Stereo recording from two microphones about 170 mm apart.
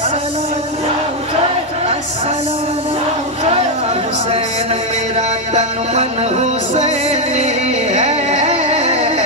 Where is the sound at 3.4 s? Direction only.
35° right (ahead or behind).